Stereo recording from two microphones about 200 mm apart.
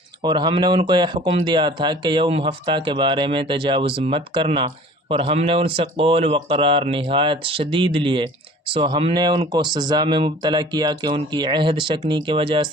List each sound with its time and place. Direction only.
0.2 s speech: 20° right (ahead or behind)